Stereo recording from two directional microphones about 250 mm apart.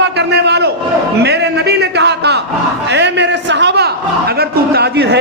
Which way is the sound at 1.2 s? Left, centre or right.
Right.